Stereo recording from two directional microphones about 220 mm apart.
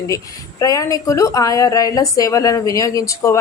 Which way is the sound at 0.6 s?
15° left (ahead or behind).